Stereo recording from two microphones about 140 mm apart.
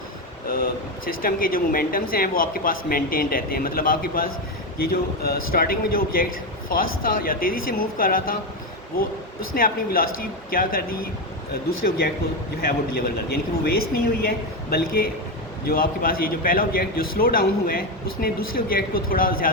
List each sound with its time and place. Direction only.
0.4 s speech: 90° left
9.6 s speech: 90° left